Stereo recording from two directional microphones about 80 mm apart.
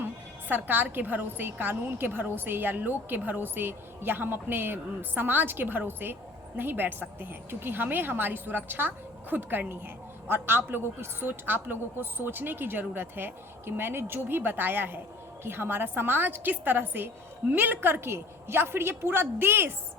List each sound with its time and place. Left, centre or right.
0.0 s a woman's voice: right